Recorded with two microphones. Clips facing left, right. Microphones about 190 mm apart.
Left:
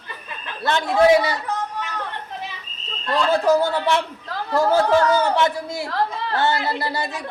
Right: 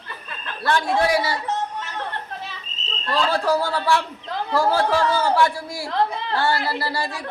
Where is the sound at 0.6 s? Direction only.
20° left (ahead or behind).